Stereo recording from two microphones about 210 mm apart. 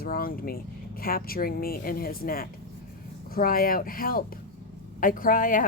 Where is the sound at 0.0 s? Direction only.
45° left (ahead or behind).